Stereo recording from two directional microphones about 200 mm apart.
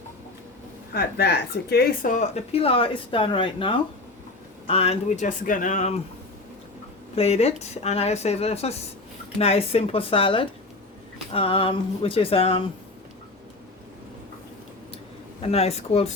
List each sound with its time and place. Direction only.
0.9 s speech: 50° left (ahead or behind)
7.2 s speech: 30° left (ahead or behind)
15.4 s speech: 30° left (ahead or behind)